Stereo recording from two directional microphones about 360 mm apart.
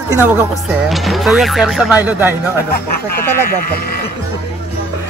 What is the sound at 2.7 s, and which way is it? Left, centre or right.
Speech, left.